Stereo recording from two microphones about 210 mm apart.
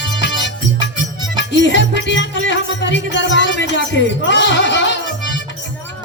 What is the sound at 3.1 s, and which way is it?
Speech, 60° left (ahead or behind).